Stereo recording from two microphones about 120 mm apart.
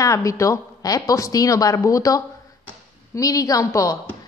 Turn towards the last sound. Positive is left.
turn(degrees=25)  # may be behind; listen again after turning